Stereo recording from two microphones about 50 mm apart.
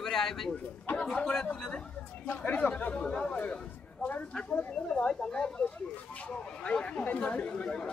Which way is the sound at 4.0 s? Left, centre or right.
Left.